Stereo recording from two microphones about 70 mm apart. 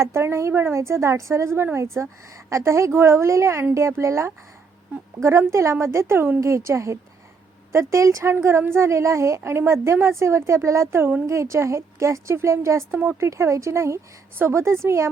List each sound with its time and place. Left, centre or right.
0.0 s a woman's voice: right
13.0 s a woman's voice: right
13.2 s a woman's voice: right